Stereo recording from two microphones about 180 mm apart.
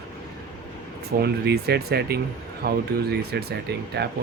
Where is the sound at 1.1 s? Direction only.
65° right (ahead or behind).